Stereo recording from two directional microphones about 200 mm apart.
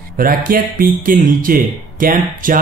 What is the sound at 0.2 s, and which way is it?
Speech, 45° right (ahead or behind).